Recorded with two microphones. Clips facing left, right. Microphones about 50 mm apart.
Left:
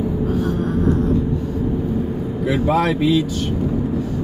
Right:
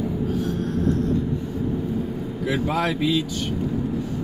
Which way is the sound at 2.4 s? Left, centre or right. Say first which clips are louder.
Left 5 dB; centre.